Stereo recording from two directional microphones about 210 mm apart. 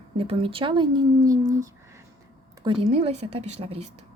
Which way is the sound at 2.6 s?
25° right (ahead or behind).